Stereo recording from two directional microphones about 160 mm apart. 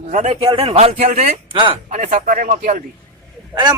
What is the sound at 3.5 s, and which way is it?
Speech, 25° right (ahead or behind).